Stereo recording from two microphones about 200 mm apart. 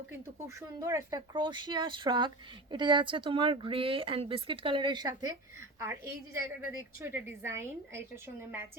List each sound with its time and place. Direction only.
0.4 s a woman's voice: 15° right (ahead or behind)